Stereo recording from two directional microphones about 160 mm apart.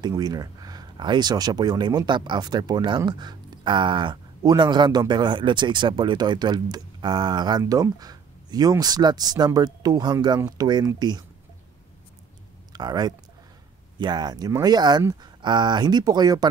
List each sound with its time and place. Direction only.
0.0 s speech: 25° right (ahead or behind)
12.7 s speech: 25° right (ahead or behind)